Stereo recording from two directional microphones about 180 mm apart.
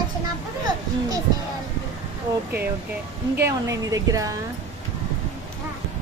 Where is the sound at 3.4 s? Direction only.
20° right (ahead or behind).